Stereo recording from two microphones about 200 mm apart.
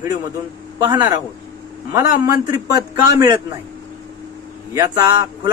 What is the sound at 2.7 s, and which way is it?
Speech, 15° right (ahead or behind).